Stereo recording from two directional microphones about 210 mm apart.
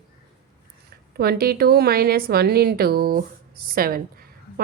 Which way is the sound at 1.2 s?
45° right (ahead or behind).